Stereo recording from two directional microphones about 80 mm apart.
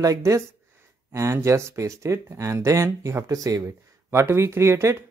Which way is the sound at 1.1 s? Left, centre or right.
Right.